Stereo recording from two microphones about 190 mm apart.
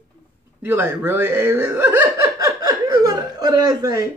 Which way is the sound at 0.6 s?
10° right (ahead or behind).